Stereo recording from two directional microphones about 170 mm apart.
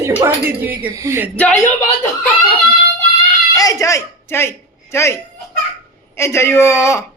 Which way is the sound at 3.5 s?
20° left (ahead or behind).